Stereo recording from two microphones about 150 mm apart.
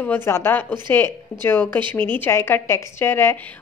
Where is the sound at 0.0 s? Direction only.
15° left (ahead or behind).